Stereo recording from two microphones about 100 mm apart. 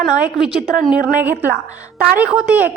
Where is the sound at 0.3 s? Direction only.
5° right (ahead or behind).